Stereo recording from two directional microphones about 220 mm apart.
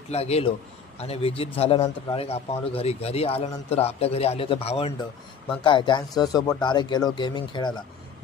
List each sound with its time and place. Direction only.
0.1 s a man's voice: 30° left (ahead or behind)